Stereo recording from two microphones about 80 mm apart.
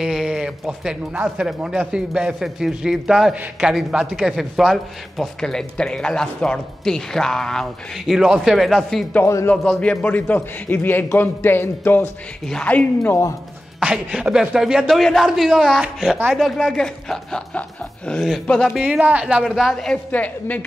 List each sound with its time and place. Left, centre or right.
0.0 s speech: centre
9.2 s a man's voice: left
9.5 s a man's voice: centre
13.7 s speech: centre
18.8 s speech: centre
19.4 s speech: centre
20.1 s a man's voice: centre